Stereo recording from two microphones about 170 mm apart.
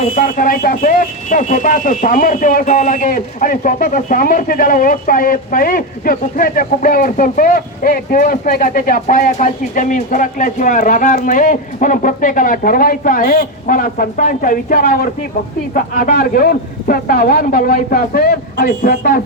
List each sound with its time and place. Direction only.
0.2 s a man's voice: 55° left (ahead or behind)